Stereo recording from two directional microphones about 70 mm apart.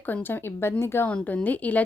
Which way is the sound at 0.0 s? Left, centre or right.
Left.